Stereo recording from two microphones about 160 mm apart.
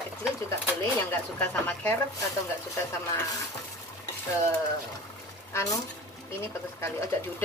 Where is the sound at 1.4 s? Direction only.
10° left (ahead or behind).